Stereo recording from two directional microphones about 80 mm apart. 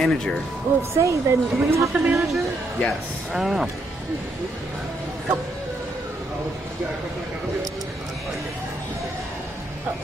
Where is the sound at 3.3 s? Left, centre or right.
Centre.